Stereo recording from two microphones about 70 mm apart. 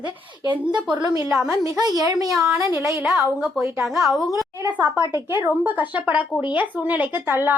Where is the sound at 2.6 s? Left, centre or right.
Right.